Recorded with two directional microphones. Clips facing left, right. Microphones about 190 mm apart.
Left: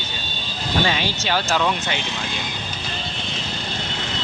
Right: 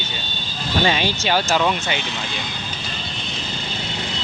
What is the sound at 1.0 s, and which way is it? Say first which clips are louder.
Speech: right 3 dB; 15° right (ahead or behind).